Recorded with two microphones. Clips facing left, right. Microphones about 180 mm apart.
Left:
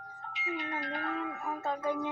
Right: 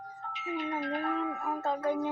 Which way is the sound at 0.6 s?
5° right (ahead or behind).